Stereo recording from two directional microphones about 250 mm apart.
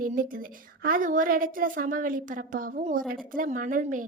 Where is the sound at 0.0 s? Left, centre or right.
Right.